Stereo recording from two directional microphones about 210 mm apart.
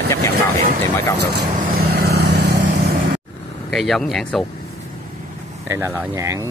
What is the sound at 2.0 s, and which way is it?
Vehicle, 90° right.